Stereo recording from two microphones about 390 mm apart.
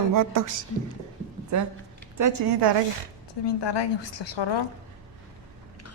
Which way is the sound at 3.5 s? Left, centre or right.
Left.